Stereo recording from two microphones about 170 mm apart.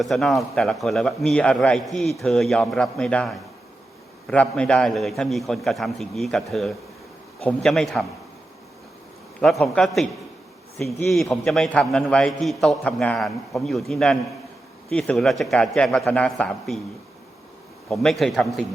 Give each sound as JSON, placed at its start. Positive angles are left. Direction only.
{"t": 0.0, "sound": "a man's voice", "side_deg": 0}
{"t": 9.4, "sound": "a man's voice", "side_deg": 0}
{"t": 17.8, "sound": "a man's voice", "side_deg": 0}